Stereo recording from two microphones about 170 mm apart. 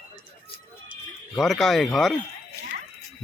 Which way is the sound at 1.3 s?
Centre (ahead or behind).